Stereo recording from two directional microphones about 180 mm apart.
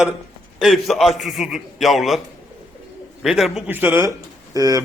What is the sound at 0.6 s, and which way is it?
A man's voice, centre (ahead or behind).